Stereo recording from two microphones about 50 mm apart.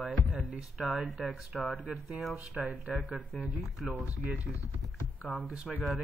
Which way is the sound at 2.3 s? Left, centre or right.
Right.